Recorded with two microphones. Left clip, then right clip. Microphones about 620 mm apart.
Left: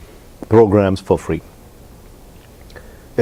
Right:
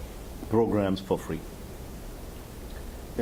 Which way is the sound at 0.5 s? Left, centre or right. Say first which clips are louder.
Left 14 dB; left.